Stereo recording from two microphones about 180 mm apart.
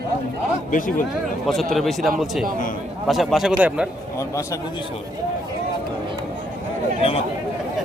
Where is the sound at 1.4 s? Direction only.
Centre (ahead or behind).